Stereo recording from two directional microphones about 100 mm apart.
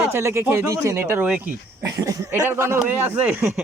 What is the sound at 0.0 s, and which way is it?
Speech, 25° right (ahead or behind).